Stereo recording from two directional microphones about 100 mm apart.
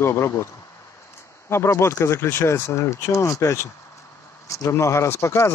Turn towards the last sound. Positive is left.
turn(degrees=25)  # may be behind; listen again after turning